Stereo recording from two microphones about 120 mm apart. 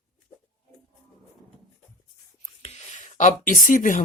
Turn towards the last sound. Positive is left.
turn(degrees=90)